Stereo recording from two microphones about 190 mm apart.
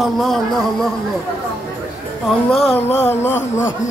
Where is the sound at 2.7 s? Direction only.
35° left (ahead or behind).